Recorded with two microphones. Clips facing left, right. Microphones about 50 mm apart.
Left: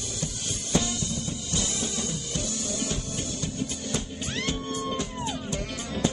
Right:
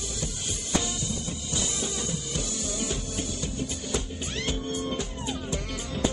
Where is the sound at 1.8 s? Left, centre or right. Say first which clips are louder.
Even; centre.